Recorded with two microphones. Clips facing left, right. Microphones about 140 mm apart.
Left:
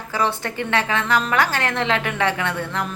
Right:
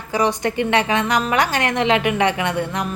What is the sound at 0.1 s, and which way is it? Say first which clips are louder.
A woman's voice: right 4 dB; 15° right (ahead or behind).